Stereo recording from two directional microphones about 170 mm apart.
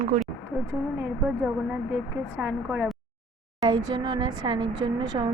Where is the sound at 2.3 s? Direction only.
10° right (ahead or behind).